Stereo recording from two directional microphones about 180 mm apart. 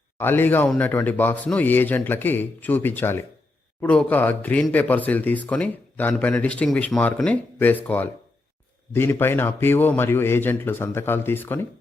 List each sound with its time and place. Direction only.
0.2 s speech: 10° left (ahead or behind)